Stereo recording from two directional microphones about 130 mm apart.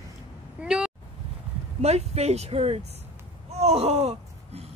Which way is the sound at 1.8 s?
55° right (ahead or behind).